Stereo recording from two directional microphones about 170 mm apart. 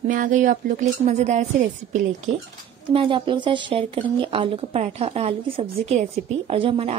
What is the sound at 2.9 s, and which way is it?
A woman's voice, 30° right (ahead or behind).